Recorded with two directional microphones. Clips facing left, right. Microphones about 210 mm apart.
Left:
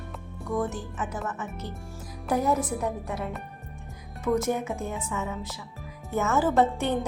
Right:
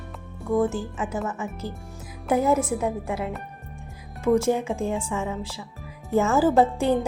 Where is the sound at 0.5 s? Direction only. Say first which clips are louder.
Right 6 dB; 30° right (ahead or behind).